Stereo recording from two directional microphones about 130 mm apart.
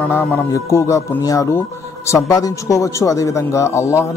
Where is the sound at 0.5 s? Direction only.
20° left (ahead or behind).